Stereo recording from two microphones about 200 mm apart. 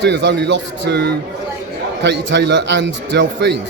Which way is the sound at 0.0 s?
60° right (ahead or behind).